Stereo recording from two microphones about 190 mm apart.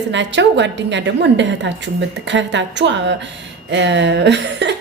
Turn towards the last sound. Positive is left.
turn(degrees=-65)  # may be behind; listen again after turning